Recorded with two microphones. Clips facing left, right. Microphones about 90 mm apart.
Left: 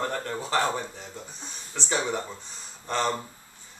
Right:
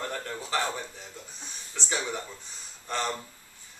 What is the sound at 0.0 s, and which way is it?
A man's voice, 35° left (ahead or behind).